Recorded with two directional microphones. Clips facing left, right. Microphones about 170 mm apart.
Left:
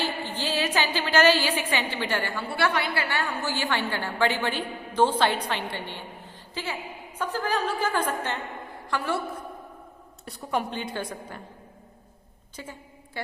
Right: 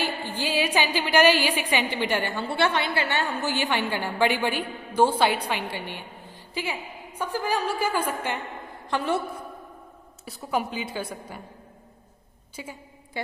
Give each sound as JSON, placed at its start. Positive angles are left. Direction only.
{"t": 0.0, "sound": "a woman's voice", "side_deg": -10}
{"t": 8.9, "sound": "a woman's voice", "side_deg": -20}
{"t": 10.2, "sound": "a woman's voice", "side_deg": -5}
{"t": 12.6, "sound": "a woman's voice", "side_deg": -10}